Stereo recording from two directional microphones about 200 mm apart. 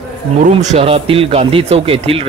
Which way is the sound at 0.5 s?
30° right (ahead or behind).